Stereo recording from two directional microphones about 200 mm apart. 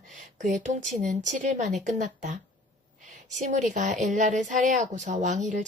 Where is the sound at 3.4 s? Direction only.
40° right (ahead or behind).